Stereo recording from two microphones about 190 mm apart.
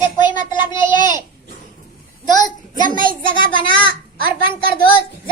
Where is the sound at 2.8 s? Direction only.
45° right (ahead or behind).